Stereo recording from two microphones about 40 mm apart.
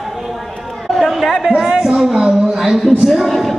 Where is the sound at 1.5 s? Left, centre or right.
Centre.